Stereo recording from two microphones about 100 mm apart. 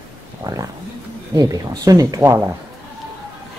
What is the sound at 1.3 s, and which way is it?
Speech, 40° right (ahead or behind).